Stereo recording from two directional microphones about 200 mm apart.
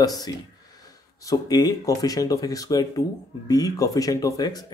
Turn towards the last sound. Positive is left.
turn(degrees=20)  # may be behind; listen again after turning